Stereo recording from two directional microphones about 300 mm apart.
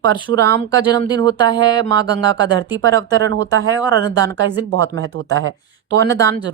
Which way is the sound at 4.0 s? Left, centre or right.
Centre.